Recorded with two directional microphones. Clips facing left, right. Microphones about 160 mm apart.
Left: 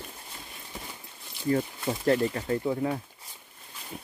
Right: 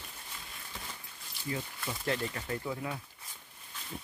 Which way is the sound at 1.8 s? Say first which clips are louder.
Left 9 dB; 40° left (ahead or behind).